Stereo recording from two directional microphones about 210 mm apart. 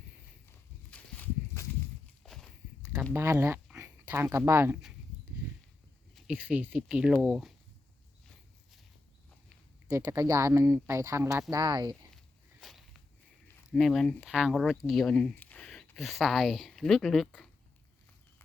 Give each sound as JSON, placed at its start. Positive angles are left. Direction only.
{"t": 0.9, "sound": "walk", "side_deg": 5}
{"t": 2.2, "sound": "a sound", "side_deg": 0}
{"t": 6.1, "sound": "speech", "side_deg": -5}
{"t": 9.9, "sound": "speech", "side_deg": -15}
{"t": 12.1, "sound": "walk", "side_deg": 0}
{"t": 13.7, "sound": "speech", "side_deg": 0}